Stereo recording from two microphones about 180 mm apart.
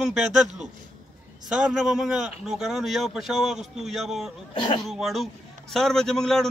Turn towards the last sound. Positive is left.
turn(degrees=0)  # may be behind; listen again after turning